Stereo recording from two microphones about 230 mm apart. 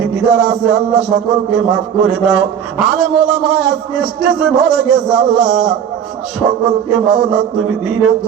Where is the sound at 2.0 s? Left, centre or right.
Centre.